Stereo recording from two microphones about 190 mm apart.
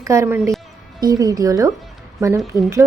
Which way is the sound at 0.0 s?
15° right (ahead or behind).